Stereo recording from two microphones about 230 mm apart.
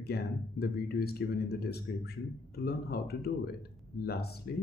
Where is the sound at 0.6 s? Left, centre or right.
Left.